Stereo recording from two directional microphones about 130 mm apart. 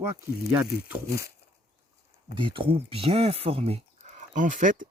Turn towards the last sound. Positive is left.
turn(degrees=-80)